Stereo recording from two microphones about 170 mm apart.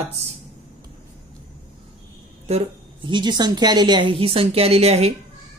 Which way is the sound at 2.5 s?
40° right (ahead or behind).